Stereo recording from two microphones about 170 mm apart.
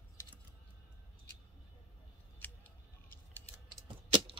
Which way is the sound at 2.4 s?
10° left (ahead or behind).